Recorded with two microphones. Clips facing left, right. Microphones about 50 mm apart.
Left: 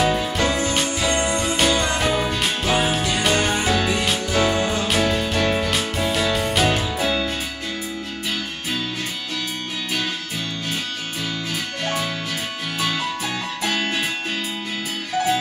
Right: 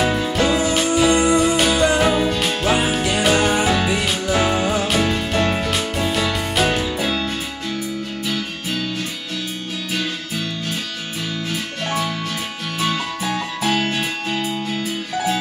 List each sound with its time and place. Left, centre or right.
0.0 s music: centre
0.4 s music: centre
2.2 s music: centre
2.6 s music: centre
4.8 s music: centre